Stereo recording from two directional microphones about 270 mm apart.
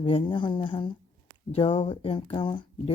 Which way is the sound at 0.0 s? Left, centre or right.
Centre.